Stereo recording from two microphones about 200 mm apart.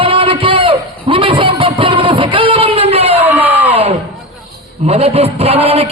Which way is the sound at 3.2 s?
10° right (ahead or behind).